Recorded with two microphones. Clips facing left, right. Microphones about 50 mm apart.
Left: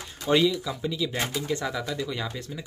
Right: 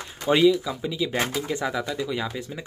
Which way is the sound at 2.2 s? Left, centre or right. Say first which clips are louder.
Right 3 dB; centre.